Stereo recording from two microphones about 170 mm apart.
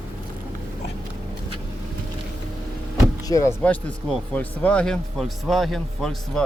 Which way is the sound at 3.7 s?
10° left (ahead or behind).